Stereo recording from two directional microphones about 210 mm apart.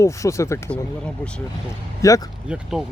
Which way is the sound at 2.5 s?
Centre (ahead or behind).